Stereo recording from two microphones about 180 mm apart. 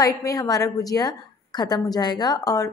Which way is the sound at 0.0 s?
20° left (ahead or behind).